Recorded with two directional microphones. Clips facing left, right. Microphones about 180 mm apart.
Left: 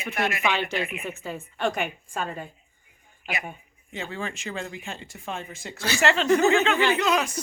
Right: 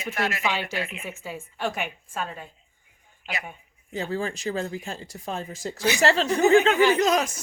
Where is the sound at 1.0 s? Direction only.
10° right (ahead or behind).